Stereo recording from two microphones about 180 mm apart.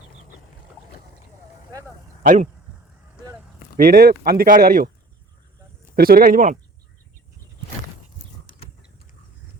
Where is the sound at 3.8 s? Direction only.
55° right (ahead or behind).